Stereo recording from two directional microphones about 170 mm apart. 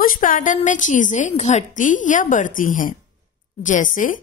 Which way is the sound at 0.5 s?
50° left (ahead or behind).